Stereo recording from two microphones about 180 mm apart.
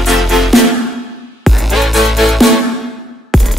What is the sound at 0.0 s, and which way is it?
Music, centre (ahead or behind).